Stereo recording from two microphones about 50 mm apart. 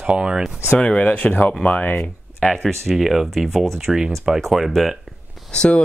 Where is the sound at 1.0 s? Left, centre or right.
Left.